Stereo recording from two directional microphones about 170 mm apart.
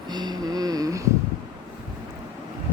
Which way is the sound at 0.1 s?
25° right (ahead or behind).